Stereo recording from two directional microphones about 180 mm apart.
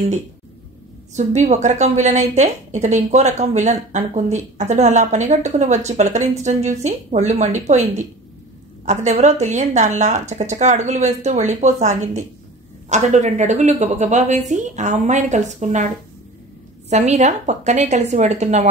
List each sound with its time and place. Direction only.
1.1 s a woman's voice: 40° right (ahead or behind)
16.9 s a woman's voice: 40° right (ahead or behind)